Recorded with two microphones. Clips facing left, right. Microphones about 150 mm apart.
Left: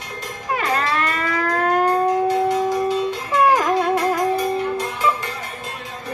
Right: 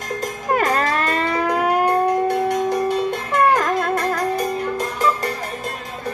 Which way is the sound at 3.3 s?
5° left (ahead or behind).